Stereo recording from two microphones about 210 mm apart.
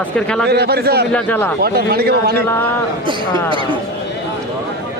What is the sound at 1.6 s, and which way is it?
Speech, 50° right (ahead or behind).